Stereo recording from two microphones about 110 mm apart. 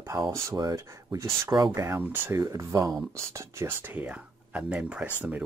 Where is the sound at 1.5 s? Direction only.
40° right (ahead or behind).